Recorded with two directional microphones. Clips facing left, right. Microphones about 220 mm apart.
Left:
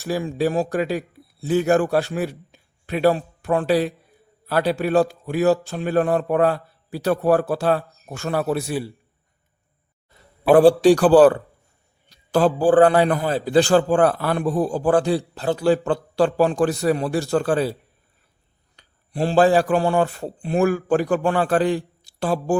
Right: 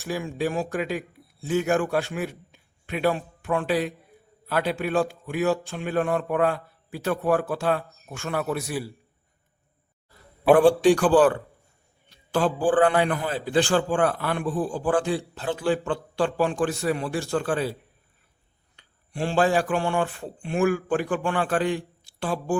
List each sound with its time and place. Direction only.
0.0 s a man's voice: 35° left (ahead or behind)
10.5 s a man's voice: 35° left (ahead or behind)
18.8 s a man's voice: 35° left (ahead or behind)